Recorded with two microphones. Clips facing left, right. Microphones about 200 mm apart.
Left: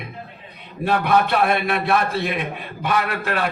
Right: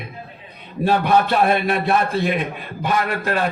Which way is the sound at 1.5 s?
35° right (ahead or behind).